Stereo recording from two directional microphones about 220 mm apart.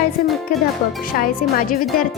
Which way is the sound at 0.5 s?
40° left (ahead or behind).